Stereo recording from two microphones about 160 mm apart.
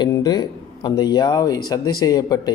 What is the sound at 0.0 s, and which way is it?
Speech, 25° left (ahead or behind).